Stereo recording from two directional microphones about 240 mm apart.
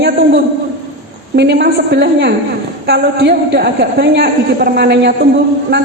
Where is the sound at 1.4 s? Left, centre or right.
Right.